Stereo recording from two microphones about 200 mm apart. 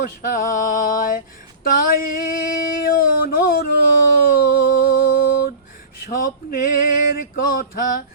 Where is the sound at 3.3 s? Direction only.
45° left (ahead or behind).